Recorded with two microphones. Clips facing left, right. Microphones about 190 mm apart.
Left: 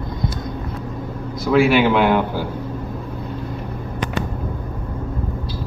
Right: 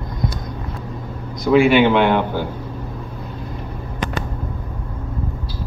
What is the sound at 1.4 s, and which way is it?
Speech, 5° left (ahead or behind).